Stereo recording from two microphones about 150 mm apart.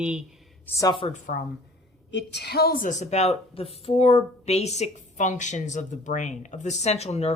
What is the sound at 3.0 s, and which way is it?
Speech, 45° left (ahead or behind).